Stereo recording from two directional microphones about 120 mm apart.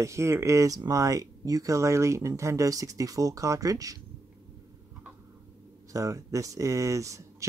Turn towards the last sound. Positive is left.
turn(degrees=-25)  # may be behind; listen again after turning